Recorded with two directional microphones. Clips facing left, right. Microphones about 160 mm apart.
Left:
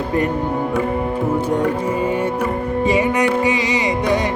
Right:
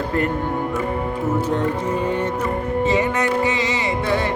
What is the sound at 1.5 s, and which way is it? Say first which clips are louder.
Music: left 3 dB; 10° left (ahead or behind).